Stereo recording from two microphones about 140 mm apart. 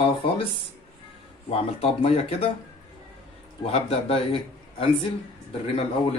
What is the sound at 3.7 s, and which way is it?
Speech, 45° left (ahead or behind).